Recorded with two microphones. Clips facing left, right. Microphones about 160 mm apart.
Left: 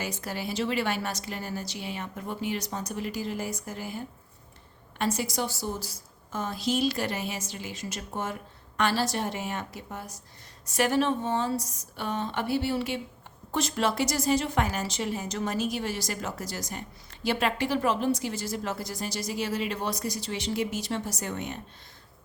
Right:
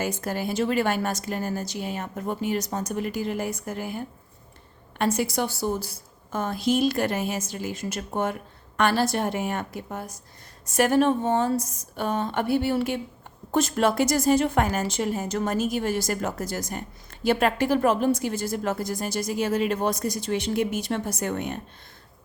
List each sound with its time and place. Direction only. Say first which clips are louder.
0.0 s a woman's voice: right 6 dB; 50° right (ahead or behind)